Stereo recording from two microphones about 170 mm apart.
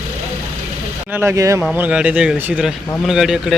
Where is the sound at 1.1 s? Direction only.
10° right (ahead or behind).